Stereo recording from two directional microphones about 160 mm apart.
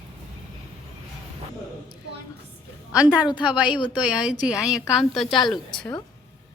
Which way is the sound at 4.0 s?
5° right (ahead or behind).